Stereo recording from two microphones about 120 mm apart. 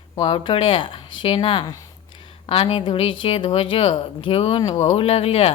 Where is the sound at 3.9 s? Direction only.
45° left (ahead or behind).